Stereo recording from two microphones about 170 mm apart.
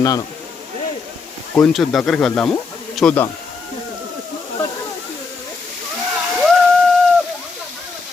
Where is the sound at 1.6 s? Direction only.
Centre (ahead or behind).